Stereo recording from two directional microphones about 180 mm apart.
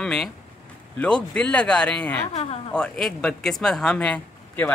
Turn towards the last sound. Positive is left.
turn(degrees=10)  # may be behind; listen again after turning